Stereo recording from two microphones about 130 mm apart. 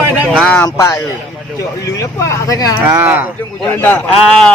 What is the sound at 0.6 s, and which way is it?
Speech, 25° left (ahead or behind).